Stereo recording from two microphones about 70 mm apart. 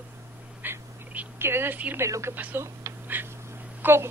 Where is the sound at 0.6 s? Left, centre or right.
Right.